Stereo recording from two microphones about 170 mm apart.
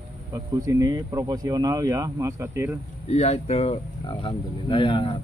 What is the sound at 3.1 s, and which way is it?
Speech, 40° left (ahead or behind).